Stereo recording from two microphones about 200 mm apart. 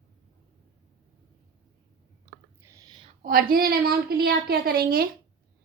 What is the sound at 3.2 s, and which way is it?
A woman's voice, 45° right (ahead or behind).